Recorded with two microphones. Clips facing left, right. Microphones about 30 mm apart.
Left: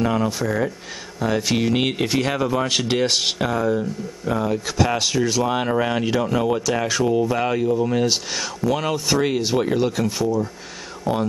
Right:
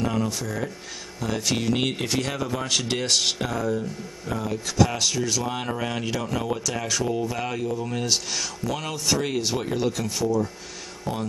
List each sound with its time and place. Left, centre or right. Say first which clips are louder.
0.0 s speech: left 5 dB; centre